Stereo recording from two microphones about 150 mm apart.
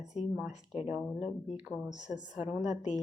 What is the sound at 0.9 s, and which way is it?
A woman's voice, 10° right (ahead or behind).